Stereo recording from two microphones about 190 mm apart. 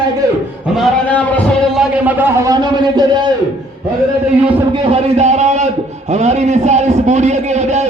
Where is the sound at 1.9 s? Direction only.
10° right (ahead or behind).